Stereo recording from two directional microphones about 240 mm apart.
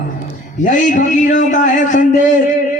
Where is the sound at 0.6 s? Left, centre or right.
Left.